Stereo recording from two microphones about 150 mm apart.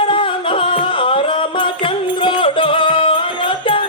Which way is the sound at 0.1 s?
35° left (ahead or behind).